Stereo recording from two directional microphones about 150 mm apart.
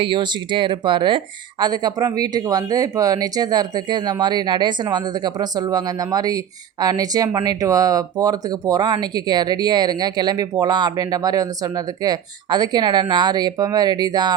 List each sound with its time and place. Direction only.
0.0 s speech: 35° right (ahead or behind)